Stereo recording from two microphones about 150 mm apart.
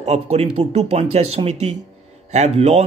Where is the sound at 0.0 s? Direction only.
45° right (ahead or behind).